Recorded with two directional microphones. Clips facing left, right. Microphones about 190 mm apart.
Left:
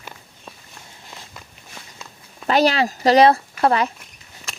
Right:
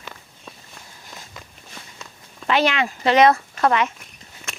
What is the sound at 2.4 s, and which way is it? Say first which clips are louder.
Speech: left 3 dB; 35° left (ahead or behind).